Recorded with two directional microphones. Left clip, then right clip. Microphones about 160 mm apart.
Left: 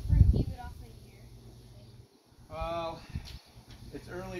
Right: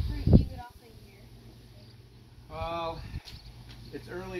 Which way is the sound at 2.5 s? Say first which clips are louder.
Right 1 dB; 30° left (ahead or behind).